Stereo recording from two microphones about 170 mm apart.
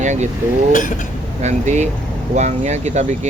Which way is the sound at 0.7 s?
50° left (ahead or behind).